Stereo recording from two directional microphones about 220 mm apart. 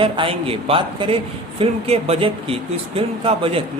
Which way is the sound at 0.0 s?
25° right (ahead or behind).